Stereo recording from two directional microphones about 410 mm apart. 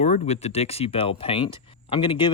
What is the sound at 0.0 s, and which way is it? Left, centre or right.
Speech, centre.